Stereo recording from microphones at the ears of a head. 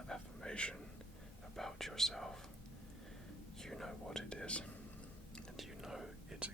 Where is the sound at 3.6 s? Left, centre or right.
Centre.